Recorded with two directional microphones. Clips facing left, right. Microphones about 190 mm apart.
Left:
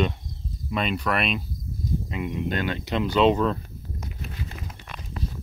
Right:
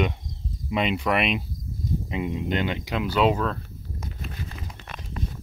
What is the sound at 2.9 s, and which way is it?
Speech, 10° right (ahead or behind).